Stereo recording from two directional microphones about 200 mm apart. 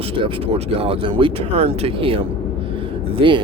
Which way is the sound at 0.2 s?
30° right (ahead or behind).